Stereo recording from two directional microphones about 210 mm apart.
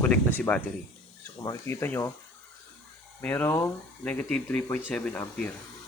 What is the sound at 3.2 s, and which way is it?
Speech, 10° left (ahead or behind).